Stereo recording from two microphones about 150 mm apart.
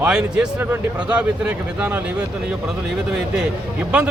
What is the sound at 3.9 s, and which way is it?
Speech, 5° right (ahead or behind).